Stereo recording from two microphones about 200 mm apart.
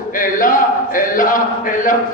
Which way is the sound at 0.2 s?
45° left (ahead or behind).